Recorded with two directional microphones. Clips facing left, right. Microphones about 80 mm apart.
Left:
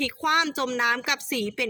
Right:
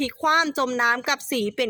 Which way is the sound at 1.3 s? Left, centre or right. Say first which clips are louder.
Right 5 dB; right.